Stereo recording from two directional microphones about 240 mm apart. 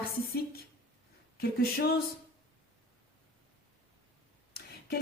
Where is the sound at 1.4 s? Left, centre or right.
Left.